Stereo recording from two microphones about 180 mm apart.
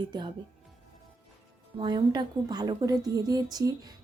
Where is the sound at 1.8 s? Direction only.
25° right (ahead or behind).